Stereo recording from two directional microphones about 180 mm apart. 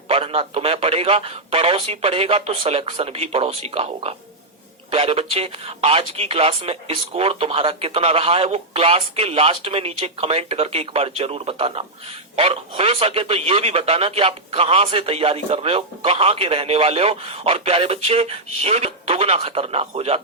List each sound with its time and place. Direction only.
0.1 s speech: 30° right (ahead or behind)